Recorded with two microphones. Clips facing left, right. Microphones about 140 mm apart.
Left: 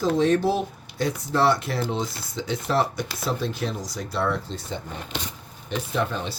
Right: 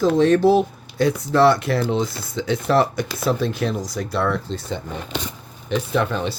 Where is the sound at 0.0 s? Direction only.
75° right (ahead or behind).